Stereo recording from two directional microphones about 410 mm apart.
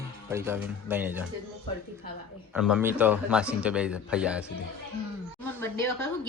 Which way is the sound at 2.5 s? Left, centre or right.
Centre.